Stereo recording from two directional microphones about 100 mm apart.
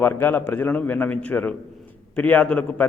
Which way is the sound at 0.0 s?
20° left (ahead or behind).